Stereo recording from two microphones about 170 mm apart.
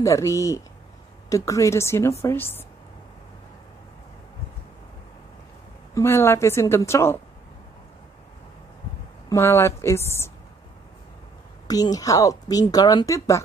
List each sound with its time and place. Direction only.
0.0 s a woman's voice: 20° left (ahead or behind)
5.9 s a woman's voice: 15° left (ahead or behind)
9.3 s a woman's voice: 15° left (ahead or behind)
11.6 s a woman's voice: 20° left (ahead or behind)